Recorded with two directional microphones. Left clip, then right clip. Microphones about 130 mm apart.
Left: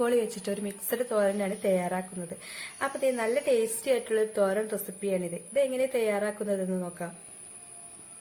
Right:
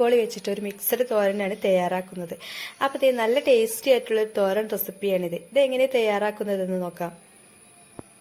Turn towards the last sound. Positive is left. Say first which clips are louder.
# right 6 dB
turn(degrees=-35)  # may be behind; listen again after turning